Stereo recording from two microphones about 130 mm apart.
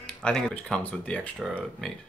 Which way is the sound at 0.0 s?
5° left (ahead or behind).